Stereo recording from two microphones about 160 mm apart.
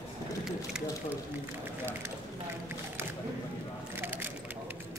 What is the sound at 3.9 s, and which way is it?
Keys jangling, 10° right (ahead or behind).